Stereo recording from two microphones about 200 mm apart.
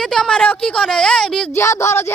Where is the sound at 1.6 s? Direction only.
15° left (ahead or behind).